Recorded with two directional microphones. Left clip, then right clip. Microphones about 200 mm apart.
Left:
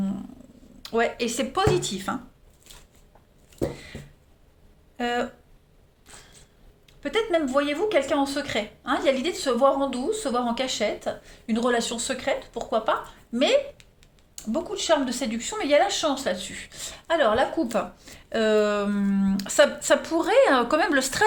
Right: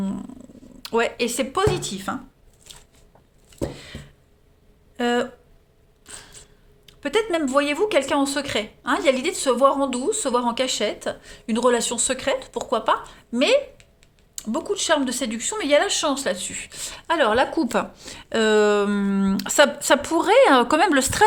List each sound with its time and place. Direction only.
0.8 s speech: 40° right (ahead or behind); by 2.1 s 25° right (ahead or behind)
3.6 s a sound: 30° right (ahead or behind)
4.9 s speech: 45° right (ahead or behind)